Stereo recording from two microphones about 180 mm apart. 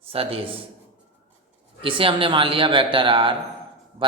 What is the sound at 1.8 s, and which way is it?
A man's voice, 30° right (ahead or behind).